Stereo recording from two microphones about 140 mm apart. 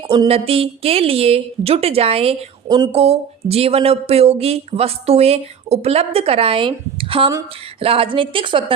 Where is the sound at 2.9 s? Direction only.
45° right (ahead or behind).